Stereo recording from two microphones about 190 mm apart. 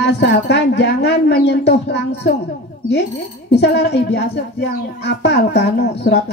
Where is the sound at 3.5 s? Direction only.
65° left (ahead or behind).